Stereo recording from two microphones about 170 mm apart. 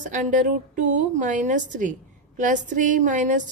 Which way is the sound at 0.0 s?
50° right (ahead or behind).